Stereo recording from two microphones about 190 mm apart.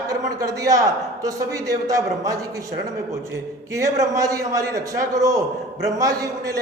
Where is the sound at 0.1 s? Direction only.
15° right (ahead or behind).